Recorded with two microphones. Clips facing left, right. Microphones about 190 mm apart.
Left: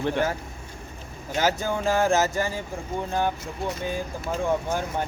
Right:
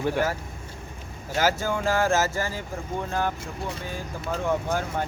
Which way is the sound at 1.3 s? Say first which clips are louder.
Even; 20° left (ahead or behind).